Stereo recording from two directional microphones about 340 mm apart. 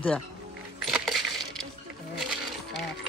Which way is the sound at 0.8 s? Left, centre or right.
Centre.